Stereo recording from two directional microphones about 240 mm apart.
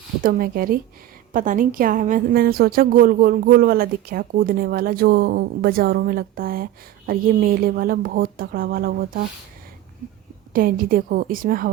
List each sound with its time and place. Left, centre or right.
0.2 s a woman's voice: right
10.5 s a woman's voice: right